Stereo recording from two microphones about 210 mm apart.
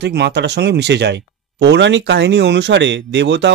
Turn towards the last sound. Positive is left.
turn(degrees=-55)  # may be behind; listen again after turning